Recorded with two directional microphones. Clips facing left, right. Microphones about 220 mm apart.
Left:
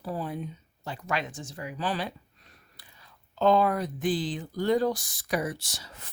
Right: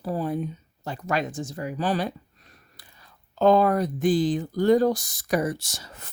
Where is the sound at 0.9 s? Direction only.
45° right (ahead or behind).